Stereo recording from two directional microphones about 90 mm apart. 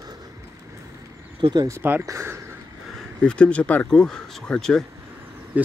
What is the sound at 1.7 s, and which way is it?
Speech, 25° right (ahead or behind).